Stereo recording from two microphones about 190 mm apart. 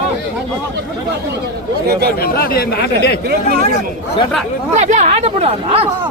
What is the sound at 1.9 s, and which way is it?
Speech, 55° right (ahead or behind).